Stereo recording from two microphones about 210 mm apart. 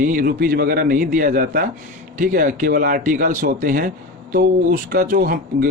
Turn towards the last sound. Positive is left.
turn(degrees=-45)  # may be behind; listen again after turning